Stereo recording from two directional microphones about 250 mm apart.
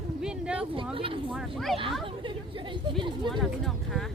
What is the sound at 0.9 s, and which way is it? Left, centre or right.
Speech, right.